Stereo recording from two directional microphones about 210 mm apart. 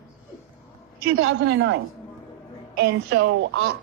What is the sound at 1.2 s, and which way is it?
Speech, 60° right (ahead or behind).